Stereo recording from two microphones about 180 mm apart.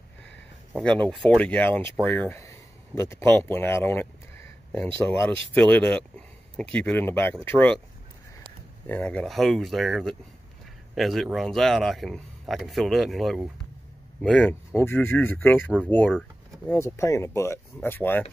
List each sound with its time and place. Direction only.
0.7 s speech: 5° left (ahead or behind)
8.8 s speech: 10° left (ahead or behind)